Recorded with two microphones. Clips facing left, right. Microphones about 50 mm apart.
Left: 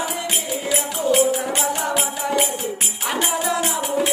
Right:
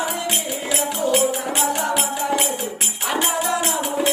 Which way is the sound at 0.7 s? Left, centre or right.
Centre.